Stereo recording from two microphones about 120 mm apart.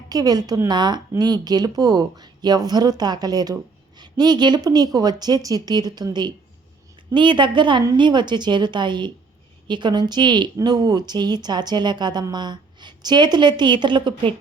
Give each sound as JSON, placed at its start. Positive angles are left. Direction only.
{"t": 0.1, "sound": "speech", "side_deg": -35}